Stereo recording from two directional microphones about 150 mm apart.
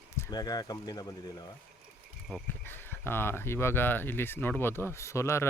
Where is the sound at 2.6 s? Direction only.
15° left (ahead or behind).